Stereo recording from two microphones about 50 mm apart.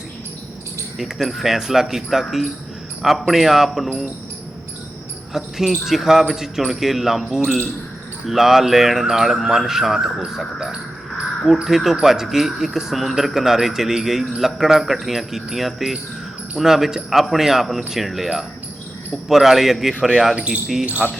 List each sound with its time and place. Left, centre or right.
0.9 s speech: centre
5.3 s speech: centre
20.3 s speech: right
21.0 s speech: centre